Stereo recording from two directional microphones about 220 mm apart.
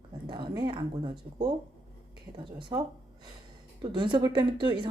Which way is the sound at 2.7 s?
20° right (ahead or behind).